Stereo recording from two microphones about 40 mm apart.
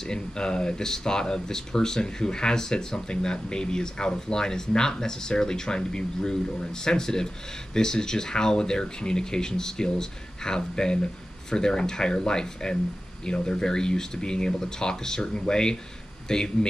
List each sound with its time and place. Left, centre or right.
0.1 s speech: left